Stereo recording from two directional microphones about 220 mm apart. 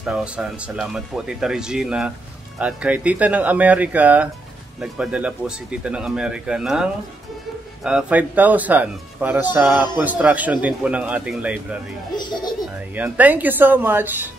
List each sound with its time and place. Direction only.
0.0 s speech: 5° right (ahead or behind)
12.2 s speech: 20° left (ahead or behind)
12.9 s speech: 5° right (ahead or behind)